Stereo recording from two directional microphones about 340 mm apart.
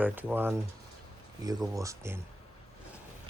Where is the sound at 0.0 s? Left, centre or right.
Centre.